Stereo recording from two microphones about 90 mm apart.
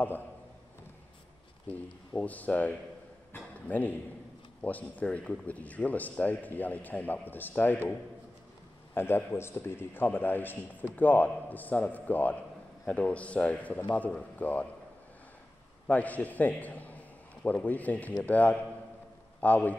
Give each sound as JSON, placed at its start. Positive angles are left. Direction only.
{"t": 1.7, "sound": "a man's voice", "side_deg": 15}
{"t": 3.3, "sound": "a sound", "side_deg": 15}
{"t": 4.6, "sound": "a man's voice", "side_deg": 15}
{"t": 8.9, "sound": "a man's voice", "side_deg": 25}
{"t": 15.9, "sound": "a man's voice", "side_deg": 15}